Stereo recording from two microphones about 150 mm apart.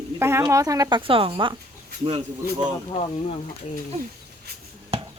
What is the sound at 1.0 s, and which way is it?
Speech, 35° right (ahead or behind).